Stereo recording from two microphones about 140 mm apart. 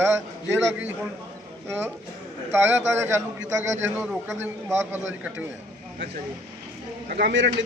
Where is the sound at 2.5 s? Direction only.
20° right (ahead or behind).